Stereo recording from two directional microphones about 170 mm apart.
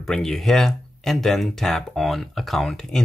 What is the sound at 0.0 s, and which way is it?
Speech, 5° left (ahead or behind).